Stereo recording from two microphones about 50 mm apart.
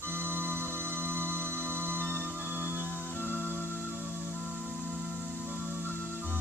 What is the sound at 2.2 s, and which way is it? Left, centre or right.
Music, right.